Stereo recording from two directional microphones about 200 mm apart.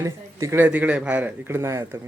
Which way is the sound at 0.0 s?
15° right (ahead or behind).